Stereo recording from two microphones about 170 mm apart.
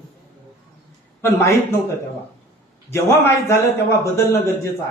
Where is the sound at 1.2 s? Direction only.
15° left (ahead or behind).